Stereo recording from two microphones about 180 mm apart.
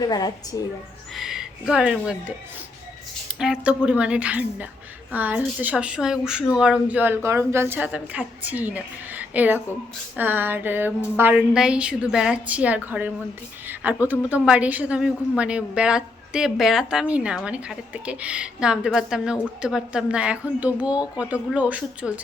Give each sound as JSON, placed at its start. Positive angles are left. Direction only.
{"t": 0.0, "sound": "a woman's voice", "side_deg": 20}
{"t": 1.1, "sound": "speech", "side_deg": 0}
{"t": 3.3, "sound": "a woman's voice", "side_deg": -5}